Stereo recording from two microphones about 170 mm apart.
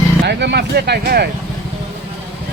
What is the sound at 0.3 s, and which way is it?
Speech, 80° right.